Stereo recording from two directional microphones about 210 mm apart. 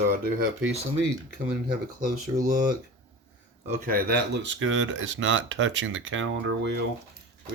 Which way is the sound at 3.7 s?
40° right (ahead or behind).